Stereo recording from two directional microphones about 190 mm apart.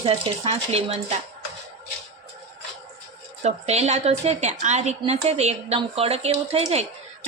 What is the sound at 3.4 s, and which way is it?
A woman's voice, 35° right (ahead or behind).